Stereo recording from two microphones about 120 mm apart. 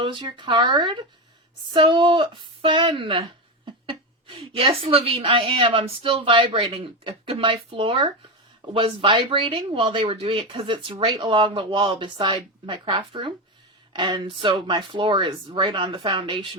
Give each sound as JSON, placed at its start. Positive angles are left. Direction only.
{"t": 0.0, "sound": "speech", "side_deg": -40}
{"t": 4.5, "sound": "speech", "side_deg": -50}